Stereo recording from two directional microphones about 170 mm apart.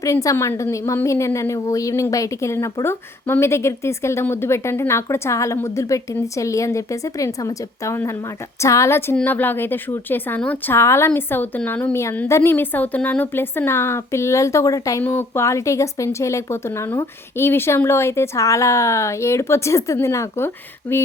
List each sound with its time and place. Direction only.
0.0 s a woman's voice: 20° left (ahead or behind)